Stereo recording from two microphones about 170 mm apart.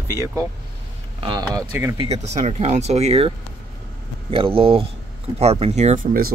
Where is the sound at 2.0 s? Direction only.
40° right (ahead or behind).